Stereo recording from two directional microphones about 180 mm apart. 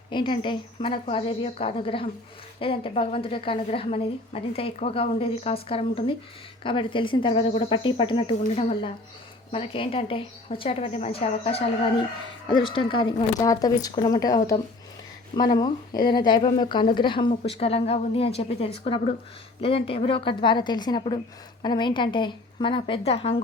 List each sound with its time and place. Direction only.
0.1 s a woman's voice: 25° left (ahead or behind)
15.4 s a woman's voice: 25° left (ahead or behind)